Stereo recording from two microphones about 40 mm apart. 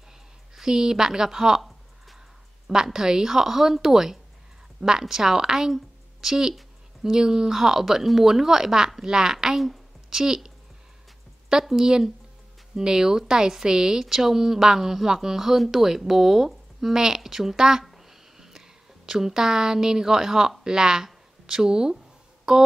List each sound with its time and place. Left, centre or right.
0.6 s speech: centre
2.7 s speech: centre
9.6 s a sound: centre
11.7 s speech: centre
17.8 s a sound: centre
20.6 s speech: centre